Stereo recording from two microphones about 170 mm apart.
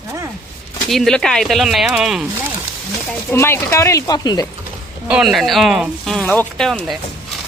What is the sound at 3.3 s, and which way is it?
Speech, 15° left (ahead or behind).